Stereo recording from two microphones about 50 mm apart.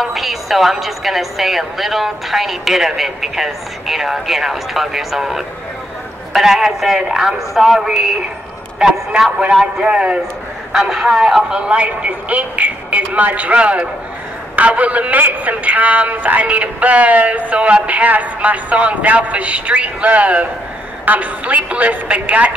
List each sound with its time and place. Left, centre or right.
0.0 s a woman's voice: centre
9.1 s speech: centre
10.7 s speech: centre; by 22.5 s right